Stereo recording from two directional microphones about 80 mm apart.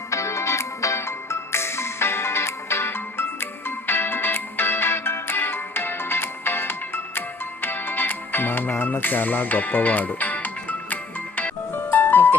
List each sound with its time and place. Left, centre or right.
0.1 s music: left